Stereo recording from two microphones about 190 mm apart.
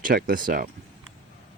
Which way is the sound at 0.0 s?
50° right (ahead or behind).